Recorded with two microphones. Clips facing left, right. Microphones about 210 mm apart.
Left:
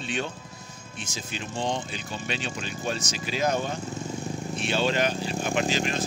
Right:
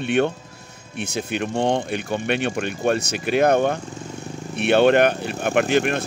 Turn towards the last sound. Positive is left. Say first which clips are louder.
# right 7 dB
turn(degrees=-60)  # may be behind; listen again after turning